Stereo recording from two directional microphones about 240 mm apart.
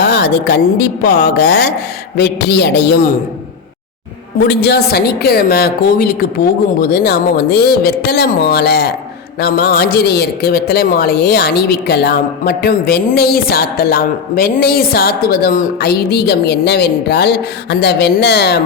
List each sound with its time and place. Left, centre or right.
0.0 s a sound: left
2.1 s a man's voice: left
4.4 s speech: left